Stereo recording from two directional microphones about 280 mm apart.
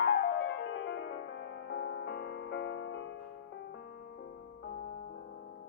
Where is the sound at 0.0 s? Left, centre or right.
Left.